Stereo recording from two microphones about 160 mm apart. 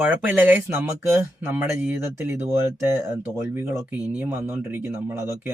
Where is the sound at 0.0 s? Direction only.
10° right (ahead or behind).